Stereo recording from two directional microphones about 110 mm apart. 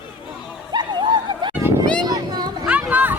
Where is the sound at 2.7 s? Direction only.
15° right (ahead or behind).